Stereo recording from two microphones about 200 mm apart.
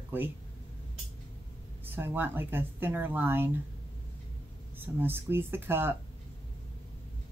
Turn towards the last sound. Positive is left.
turn(degrees=-10)  # may be behind; listen again after turning